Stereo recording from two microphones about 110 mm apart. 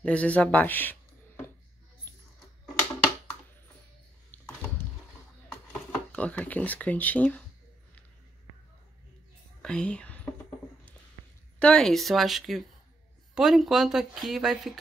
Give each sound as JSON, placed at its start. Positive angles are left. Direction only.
{"t": 0.0, "sound": "speech", "side_deg": 10}
{"t": 4.3, "sound": "a sound", "side_deg": 15}
{"t": 5.5, "sound": "speech", "side_deg": 10}
{"t": 9.6, "sound": "whispering", "side_deg": 10}
{"t": 11.6, "sound": "speech", "side_deg": 5}